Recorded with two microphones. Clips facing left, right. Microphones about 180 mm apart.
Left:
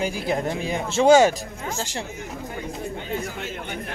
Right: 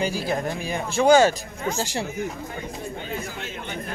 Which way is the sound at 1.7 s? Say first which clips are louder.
Right 1 dB; 10° right (ahead or behind).